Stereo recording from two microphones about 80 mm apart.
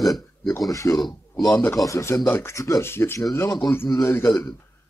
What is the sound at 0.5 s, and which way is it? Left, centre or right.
Speech, left.